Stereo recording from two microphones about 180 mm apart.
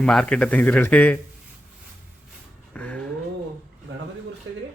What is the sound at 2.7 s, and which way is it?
Music, 5° left (ahead or behind).